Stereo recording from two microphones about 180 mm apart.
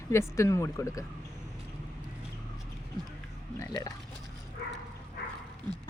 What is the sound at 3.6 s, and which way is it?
Speech, 20° left (ahead or behind).